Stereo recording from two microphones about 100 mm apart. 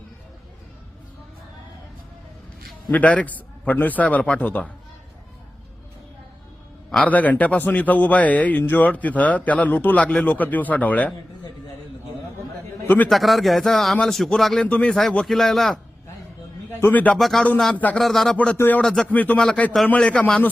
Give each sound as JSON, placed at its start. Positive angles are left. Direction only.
{"t": 2.9, "sound": "a man's voice", "side_deg": 15}
{"t": 6.9, "sound": "a man's voice", "side_deg": 15}
{"t": 12.8, "sound": "a sound", "side_deg": 20}
{"t": 13.1, "sound": "a man's voice", "side_deg": 0}
{"t": 16.6, "sound": "a man's voice", "side_deg": 15}
{"t": 17.2, "sound": "a man's voice", "side_deg": 0}
{"t": 17.7, "sound": "a man's voice", "side_deg": 15}
{"t": 18.0, "sound": "a man's voice", "side_deg": 0}
{"t": 18.5, "sound": "speech", "side_deg": 25}
{"t": 18.8, "sound": "a man's voice", "side_deg": 5}